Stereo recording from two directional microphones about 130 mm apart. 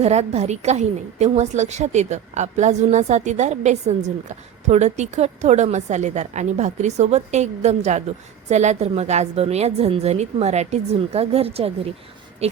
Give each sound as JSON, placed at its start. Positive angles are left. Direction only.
{"t": 0.0, "sound": "a woman's voice", "side_deg": -55}